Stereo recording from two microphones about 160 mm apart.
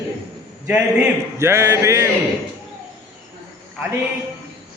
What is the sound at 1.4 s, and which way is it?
Speech, 15° right (ahead or behind).